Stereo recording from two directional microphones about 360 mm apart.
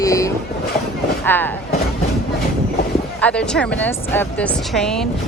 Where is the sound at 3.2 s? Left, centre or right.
Centre.